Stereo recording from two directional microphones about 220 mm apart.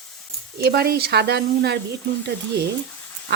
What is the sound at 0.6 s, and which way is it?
Speech, 45° right (ahead or behind).